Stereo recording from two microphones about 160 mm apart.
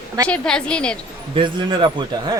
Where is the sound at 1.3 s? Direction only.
30° right (ahead or behind).